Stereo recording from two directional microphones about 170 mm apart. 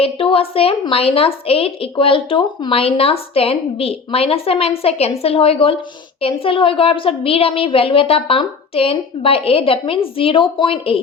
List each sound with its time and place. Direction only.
0.0 s a woman's voice: 30° left (ahead or behind)